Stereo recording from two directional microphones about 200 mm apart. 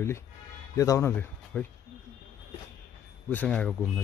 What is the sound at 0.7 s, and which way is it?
Speech, 15° left (ahead or behind).